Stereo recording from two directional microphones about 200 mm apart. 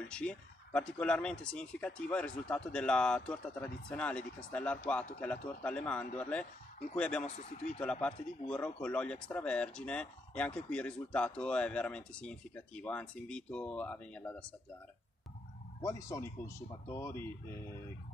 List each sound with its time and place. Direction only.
0.1 s speech: 5° left (ahead or behind)
7.2 s speech: 35° left (ahead or behind)
7.8 s speech: 5° left (ahead or behind)
15.8 s speech: 15° left (ahead or behind)